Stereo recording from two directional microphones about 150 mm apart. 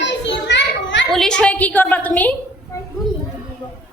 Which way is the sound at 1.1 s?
5° left (ahead or behind).